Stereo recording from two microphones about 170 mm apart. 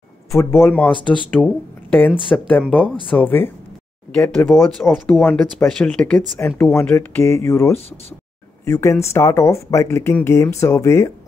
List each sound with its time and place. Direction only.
0.3 s speech: 15° left (ahead or behind); by 5.2 s centre (ahead or behind)
5.2 s speech: 10° left (ahead or behind)
6.4 s speech: 15° left (ahead or behind)